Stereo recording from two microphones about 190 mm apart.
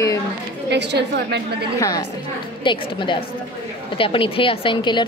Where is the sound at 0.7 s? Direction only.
65° right (ahead or behind).